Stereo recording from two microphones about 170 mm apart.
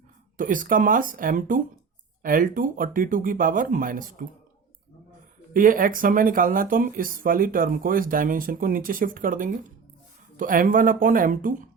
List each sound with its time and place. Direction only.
0.3 s speech: 50° right (ahead or behind)
5.5 s speech: 55° right (ahead or behind)